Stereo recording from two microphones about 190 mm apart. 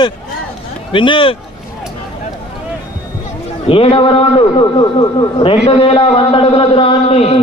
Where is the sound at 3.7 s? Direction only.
30° left (ahead or behind).